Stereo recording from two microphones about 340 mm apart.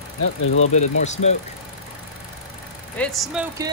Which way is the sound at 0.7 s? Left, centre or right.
Centre.